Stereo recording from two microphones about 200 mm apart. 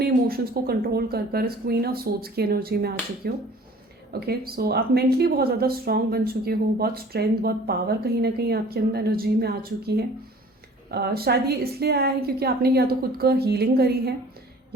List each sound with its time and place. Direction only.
0.0 s speech: 50° right (ahead or behind)